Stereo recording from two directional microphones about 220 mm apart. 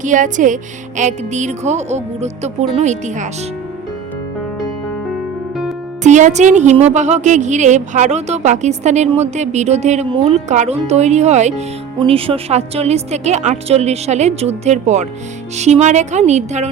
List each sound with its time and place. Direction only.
0.0 s speech: 35° right (ahead or behind)
6.0 s a woman's voice: 35° right (ahead or behind)